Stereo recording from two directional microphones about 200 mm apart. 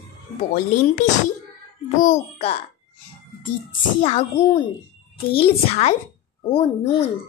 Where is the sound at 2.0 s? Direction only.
30° left (ahead or behind).